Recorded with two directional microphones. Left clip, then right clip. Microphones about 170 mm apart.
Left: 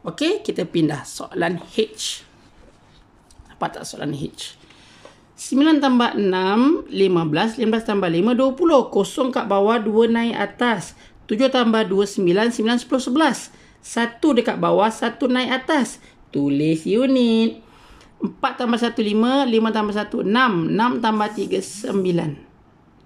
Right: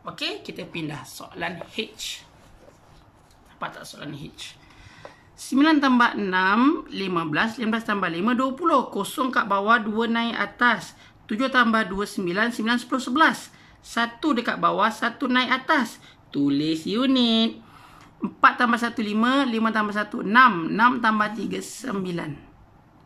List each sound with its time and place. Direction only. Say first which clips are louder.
0.0 s speech: left 9 dB; 40° left (ahead or behind)
3.5 s speech: left 7 dB; 35° left (ahead or behind)
5.0 s speech: left 3 dB; 15° left (ahead or behind)